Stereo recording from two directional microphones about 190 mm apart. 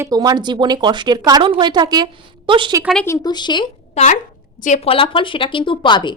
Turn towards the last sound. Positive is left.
turn(degrees=25)  # may be behind; listen again after turning